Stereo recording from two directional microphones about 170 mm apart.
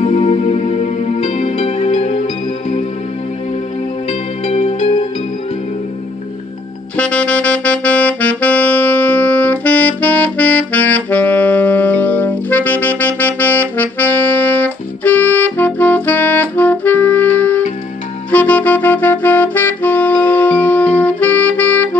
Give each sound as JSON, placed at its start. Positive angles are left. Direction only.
{"t": 0.0, "sound": "music", "side_deg": 40}
{"t": 4.1, "sound": "music", "side_deg": 40}
{"t": 7.0, "sound": "saxophone", "side_deg": 5}
{"t": 18.3, "sound": "music", "side_deg": 10}